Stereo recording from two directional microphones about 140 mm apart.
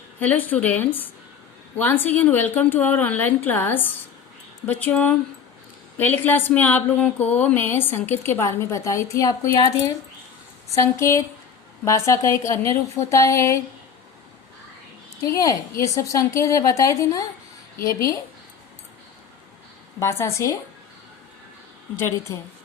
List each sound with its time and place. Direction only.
0.2 s a woman's voice: 15° left (ahead or behind)
15.2 s a woman's voice: 25° left (ahead or behind)
20.0 s a woman's voice: 20° left (ahead or behind)
21.9 s speech: 15° left (ahead or behind)